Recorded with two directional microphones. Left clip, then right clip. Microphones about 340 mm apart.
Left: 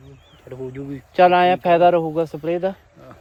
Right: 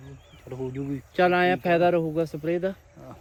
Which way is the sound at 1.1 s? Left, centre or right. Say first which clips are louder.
Left 8 dB; centre.